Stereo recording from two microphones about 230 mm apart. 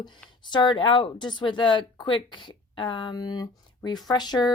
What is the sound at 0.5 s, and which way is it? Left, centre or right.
Speech, centre.